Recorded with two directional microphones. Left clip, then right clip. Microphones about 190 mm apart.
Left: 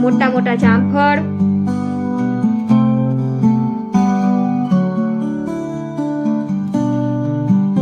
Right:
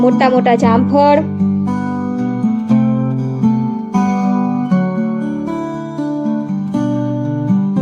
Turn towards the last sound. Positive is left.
turn(degrees=0)  # may be behind; listen again after turning